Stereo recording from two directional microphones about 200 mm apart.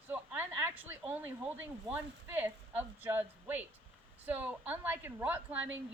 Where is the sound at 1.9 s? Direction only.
10° right (ahead or behind).